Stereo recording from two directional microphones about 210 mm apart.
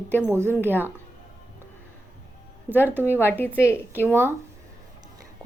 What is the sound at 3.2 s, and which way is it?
Speech, 10° left (ahead or behind).